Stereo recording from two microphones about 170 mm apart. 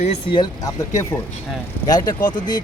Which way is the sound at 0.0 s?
35° left (ahead or behind).